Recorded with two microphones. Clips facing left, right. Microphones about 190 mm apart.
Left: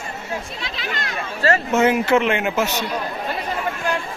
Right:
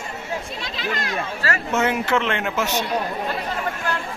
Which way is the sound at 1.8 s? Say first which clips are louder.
Left 3 dB; 10° left (ahead or behind).